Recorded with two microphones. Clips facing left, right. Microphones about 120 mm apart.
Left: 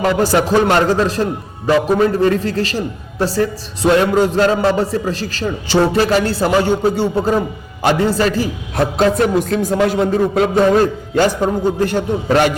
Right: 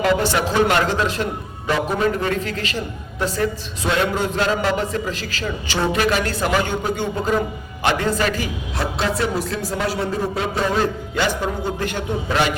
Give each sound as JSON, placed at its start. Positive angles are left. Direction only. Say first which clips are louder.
{"t": 0.0, "sound": "a man's voice", "louder": "left 4 dB", "side_deg": 40}
{"t": 8.7, "sound": "a man's voice", "louder": "left 9 dB", "side_deg": 50}